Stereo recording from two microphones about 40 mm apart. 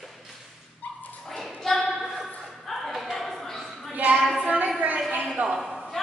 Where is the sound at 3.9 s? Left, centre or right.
Right.